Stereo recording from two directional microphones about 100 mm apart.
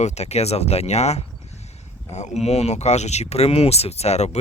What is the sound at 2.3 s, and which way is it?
Speech, 90° left.